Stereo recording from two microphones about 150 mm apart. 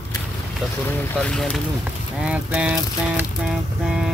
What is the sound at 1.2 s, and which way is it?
Speech, 5° left (ahead or behind).